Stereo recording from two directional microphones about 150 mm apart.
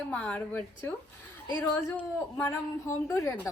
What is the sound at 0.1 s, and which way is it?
Speech, 10° left (ahead or behind).